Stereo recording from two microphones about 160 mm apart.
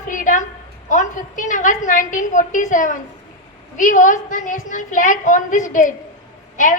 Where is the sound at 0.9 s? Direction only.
50° left (ahead or behind).